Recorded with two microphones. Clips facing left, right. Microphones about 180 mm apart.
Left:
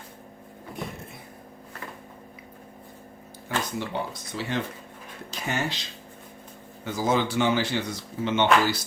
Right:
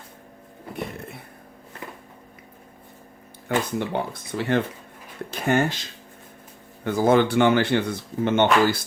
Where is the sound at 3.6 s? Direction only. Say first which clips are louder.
Right 4 dB; 55° right (ahead or behind).